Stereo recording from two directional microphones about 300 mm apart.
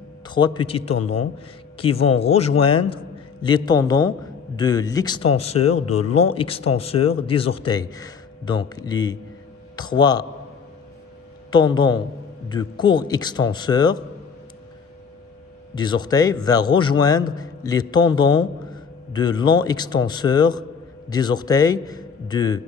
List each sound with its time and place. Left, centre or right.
0.3 s a man's voice: centre
11.5 s a man's voice: centre
15.7 s a man's voice: centre